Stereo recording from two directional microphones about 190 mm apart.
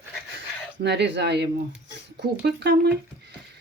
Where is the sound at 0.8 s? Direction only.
65° right (ahead or behind).